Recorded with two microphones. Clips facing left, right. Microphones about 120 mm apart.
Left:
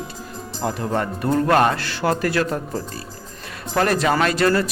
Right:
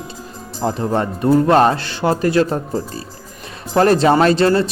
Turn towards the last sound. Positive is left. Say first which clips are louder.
# right 5 dB
turn(degrees=-25)  # may be behind; listen again after turning